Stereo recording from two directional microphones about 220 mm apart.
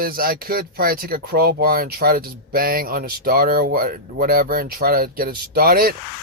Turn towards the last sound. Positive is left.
turn(degrees=-40)  # may be behind; listen again after turning